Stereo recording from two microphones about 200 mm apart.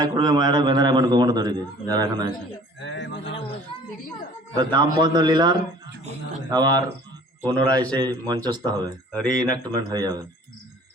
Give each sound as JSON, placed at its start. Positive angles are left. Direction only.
{"t": 0.0, "sound": "a man's voice", "side_deg": -20}
{"t": 2.8, "sound": "speech", "side_deg": 65}
{"t": 4.5, "sound": "a man's voice", "side_deg": -20}
{"t": 7.4, "sound": "a man's voice", "side_deg": 10}
{"t": 7.9, "sound": "a man's voice", "side_deg": -20}
{"t": 9.1, "sound": "speech", "side_deg": 5}
{"t": 9.5, "sound": "a man's voice", "side_deg": -20}